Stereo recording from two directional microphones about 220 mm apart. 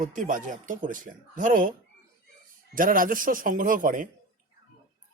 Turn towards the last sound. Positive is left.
turn(degrees=-40)  # may be behind; listen again after turning